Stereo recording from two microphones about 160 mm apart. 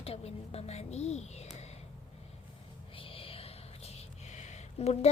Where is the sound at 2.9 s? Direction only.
35° left (ahead or behind).